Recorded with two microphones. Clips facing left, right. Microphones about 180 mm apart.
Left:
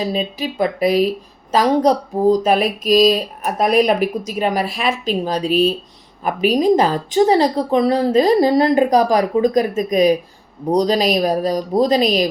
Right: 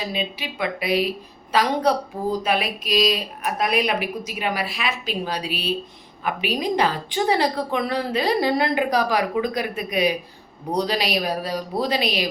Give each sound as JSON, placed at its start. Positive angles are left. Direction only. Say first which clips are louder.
{"t": 0.0, "sound": "a woman's voice", "louder": "left 7 dB", "side_deg": 40}